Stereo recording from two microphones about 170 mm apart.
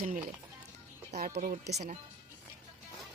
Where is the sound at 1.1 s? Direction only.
45° right (ahead or behind).